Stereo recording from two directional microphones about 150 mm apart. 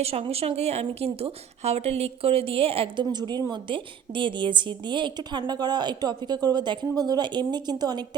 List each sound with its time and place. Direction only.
0.0 s a woman's voice: 40° right (ahead or behind)